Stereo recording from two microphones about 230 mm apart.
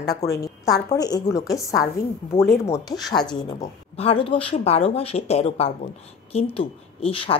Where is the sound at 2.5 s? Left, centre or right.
Centre.